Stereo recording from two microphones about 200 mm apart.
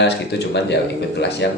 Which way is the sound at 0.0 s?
60° left (ahead or behind).